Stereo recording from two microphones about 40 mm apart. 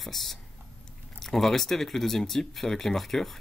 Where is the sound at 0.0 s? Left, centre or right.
Centre.